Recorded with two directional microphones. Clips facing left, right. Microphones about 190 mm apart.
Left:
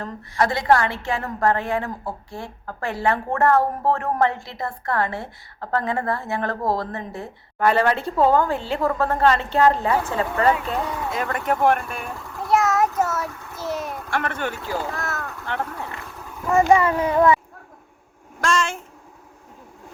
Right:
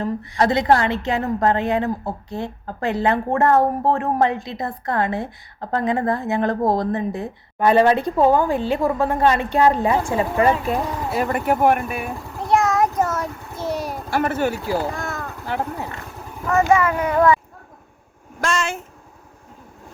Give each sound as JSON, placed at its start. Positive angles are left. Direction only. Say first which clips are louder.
{"t": 0.0, "sound": "a woman's voice", "louder": "right 3 dB", "side_deg": -20}
{"t": 12.5, "sound": "a sound", "louder": "right 1 dB", "side_deg": 5}
{"t": 13.6, "sound": "a sound", "louder": "right 3 dB", "side_deg": -30}
{"t": 14.1, "sound": "a woman's voice", "louder": "right 6 dB", "side_deg": -5}
{"t": 14.9, "sound": "speech", "louder": "right 1 dB", "side_deg": 5}
{"t": 15.2, "sound": "a sound", "louder": "right 2 dB", "side_deg": -15}
{"t": 15.5, "sound": "speech", "louder": "right 3 dB", "side_deg": -20}
{"t": 16.6, "sound": "speech", "louder": "left 1 dB", "side_deg": 30}
{"t": 18.3, "sound": "speech", "louder": "even", "side_deg": -5}